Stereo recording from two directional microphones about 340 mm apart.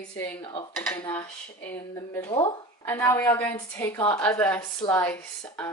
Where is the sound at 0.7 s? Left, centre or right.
Centre.